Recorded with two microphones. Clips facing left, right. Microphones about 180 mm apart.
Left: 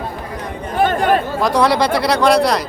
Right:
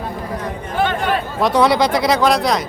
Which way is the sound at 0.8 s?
45° left (ahead or behind).